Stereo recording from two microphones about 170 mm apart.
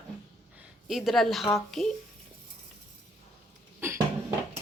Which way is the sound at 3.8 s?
15° right (ahead or behind).